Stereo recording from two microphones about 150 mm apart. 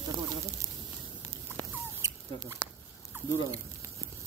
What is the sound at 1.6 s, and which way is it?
Rodents, 20° right (ahead or behind).